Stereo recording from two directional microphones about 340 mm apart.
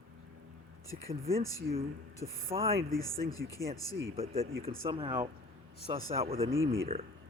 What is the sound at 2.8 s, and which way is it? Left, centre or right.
Speech, centre.